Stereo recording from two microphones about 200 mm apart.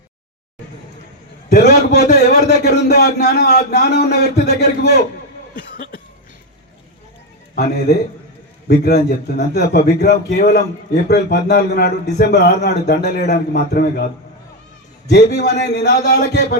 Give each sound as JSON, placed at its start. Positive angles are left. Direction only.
{"t": 1.5, "sound": "a man's voice", "side_deg": 55}
{"t": 5.7, "sound": "cough", "side_deg": 45}
{"t": 7.5, "sound": "a man's voice", "side_deg": 55}
{"t": 15.1, "sound": "speech", "side_deg": 55}